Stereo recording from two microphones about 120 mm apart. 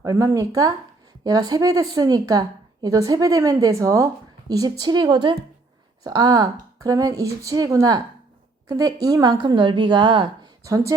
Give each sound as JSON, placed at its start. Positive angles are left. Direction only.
{"t": 0.0, "sound": "speech", "side_deg": -25}
{"t": 10.6, "sound": "speech", "side_deg": -25}